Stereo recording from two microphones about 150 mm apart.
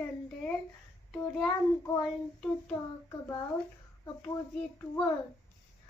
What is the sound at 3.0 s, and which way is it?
Child singing, 20° left (ahead or behind).